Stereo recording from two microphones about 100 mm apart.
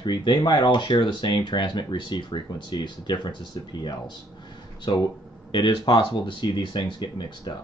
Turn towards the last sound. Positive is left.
turn(degrees=50)  # may be behind; listen again after turning